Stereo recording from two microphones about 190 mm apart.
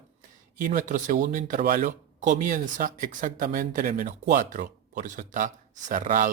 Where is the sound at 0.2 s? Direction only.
45° right (ahead or behind).